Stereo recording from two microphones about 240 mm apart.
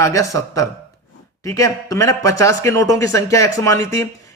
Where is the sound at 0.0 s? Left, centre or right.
Centre.